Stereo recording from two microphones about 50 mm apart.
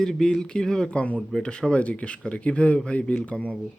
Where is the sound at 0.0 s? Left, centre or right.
Centre.